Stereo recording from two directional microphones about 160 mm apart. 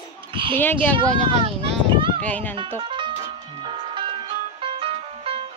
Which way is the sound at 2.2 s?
10° left (ahead or behind).